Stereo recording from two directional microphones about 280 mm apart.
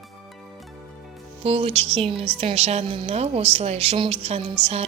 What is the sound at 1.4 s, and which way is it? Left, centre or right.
A woman's voice, centre.